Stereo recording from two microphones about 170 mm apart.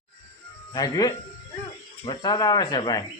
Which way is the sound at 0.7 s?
20° left (ahead or behind).